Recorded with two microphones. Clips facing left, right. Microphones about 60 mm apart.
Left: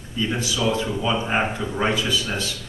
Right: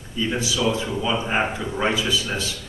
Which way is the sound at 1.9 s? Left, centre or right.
Centre.